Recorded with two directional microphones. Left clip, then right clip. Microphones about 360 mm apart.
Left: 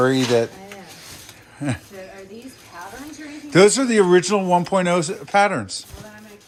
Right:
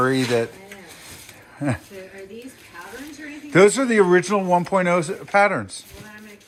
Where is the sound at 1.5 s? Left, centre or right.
Centre.